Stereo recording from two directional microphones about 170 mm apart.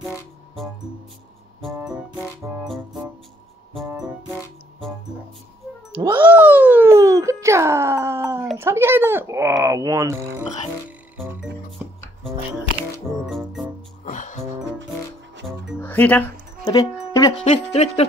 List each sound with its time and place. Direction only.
2.6 s music: centre (ahead or behind)
5.9 s music: 30° right (ahead or behind)
6.3 s a sound: 10° right (ahead or behind)
13.3 s music: centre (ahead or behind)
14.0 s music: 45° left (ahead or behind)
15.8 s music: 10° left (ahead or behind)
16.6 s music: 20° left (ahead or behind)
17.8 s music: 40° left (ahead or behind)